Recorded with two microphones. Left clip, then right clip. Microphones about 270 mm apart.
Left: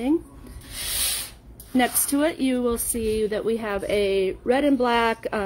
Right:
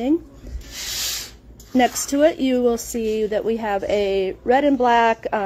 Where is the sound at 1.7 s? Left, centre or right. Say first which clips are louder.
Right 5 dB; centre.